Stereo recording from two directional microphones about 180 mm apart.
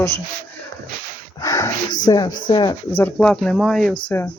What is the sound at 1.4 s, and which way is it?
Speech, 20° left (ahead or behind).